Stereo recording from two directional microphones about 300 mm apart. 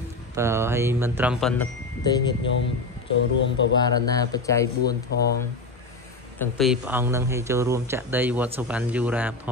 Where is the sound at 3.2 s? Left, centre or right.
Left.